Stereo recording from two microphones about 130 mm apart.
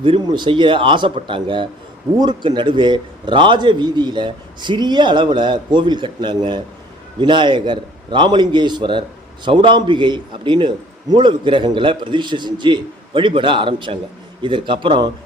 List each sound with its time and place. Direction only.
0.0 s a man's voice: 40° right (ahead or behind)